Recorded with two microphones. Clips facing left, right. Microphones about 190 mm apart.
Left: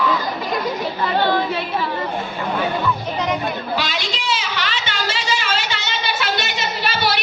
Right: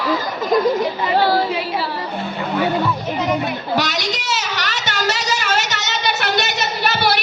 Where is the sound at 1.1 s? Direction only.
35° right (ahead or behind).